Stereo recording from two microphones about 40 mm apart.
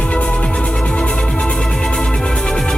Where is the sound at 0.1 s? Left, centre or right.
Left.